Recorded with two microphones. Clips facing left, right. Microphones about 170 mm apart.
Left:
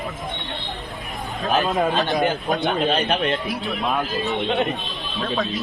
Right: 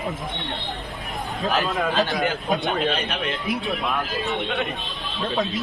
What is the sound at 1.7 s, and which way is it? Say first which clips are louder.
Speech: left 2 dB; 20° left (ahead or behind).